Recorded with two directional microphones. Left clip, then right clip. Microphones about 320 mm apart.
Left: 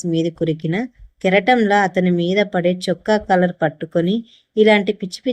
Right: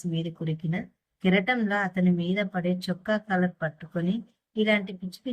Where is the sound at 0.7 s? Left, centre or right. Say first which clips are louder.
Left 12 dB; centre.